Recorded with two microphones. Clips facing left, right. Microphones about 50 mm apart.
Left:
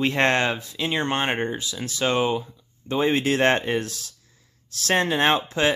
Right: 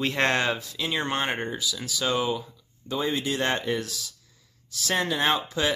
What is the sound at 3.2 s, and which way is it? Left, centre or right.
Speech, left.